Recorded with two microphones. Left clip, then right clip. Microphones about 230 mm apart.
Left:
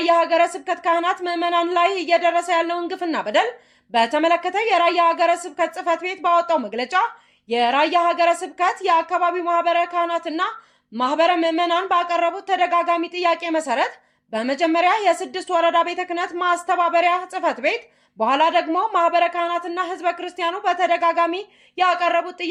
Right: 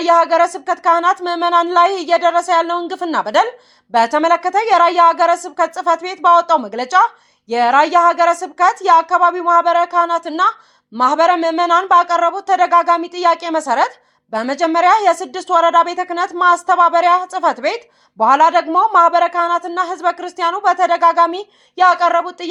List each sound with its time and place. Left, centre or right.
0.0 s speech: centre